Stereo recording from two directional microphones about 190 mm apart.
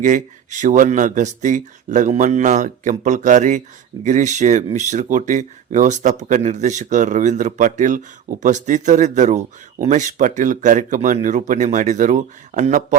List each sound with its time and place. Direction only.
0.0 s speech: 40° right (ahead or behind)